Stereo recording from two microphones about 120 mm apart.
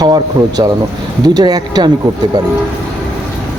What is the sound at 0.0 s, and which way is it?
Speech, 30° right (ahead or behind).